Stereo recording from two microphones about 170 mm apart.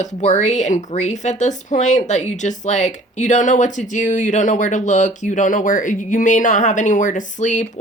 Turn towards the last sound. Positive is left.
turn(degrees=45)  # may be behind; listen again after turning